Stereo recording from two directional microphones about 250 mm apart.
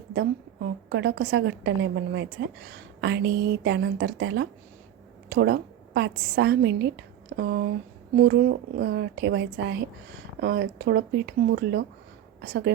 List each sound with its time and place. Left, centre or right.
0.1 s a woman's voice: right